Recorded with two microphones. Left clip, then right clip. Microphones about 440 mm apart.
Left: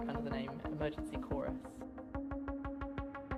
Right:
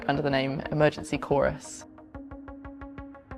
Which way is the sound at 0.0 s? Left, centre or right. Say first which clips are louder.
Right 15 dB; right.